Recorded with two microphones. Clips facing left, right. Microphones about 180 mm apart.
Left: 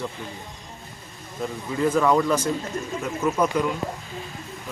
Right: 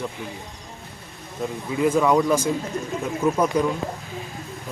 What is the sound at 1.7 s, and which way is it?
Speech, 10° right (ahead or behind).